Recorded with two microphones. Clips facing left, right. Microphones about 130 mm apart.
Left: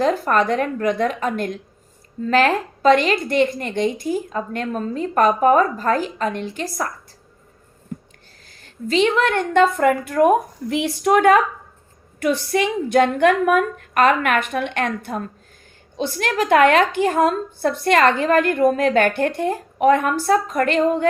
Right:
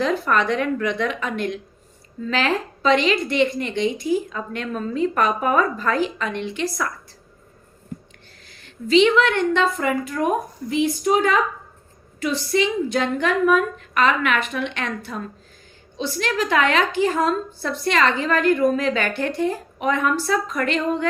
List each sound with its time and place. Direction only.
0.0 s a woman's voice: 45° left (ahead or behind)
8.4 s a woman's voice: 40° left (ahead or behind)